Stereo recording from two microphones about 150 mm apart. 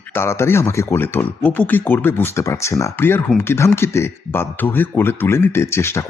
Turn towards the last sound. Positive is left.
turn(degrees=20)  # may be behind; listen again after turning